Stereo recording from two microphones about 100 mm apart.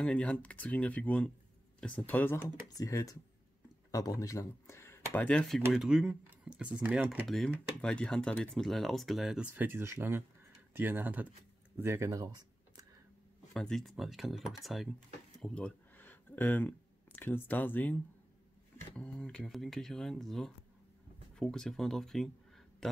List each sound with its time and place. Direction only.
0.0 s speech: 15° left (ahead or behind)
2.8 s speech: 35° left (ahead or behind); by 5.5 s 15° left (ahead or behind)
5.5 s speech: centre (ahead or behind)
7.2 s speech: 5° left (ahead or behind)
9.6 s speech: 20° right (ahead or behind); by 12.8 s 40° right (ahead or behind)
13.5 s speech: 5° left (ahead or behind)
15.3 s a sound: 10° left (ahead or behind)
18.9 s speech: 10° left (ahead or behind)